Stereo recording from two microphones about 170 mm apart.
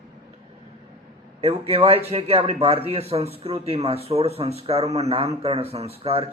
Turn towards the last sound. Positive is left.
turn(degrees=-35)  # may be behind; listen again after turning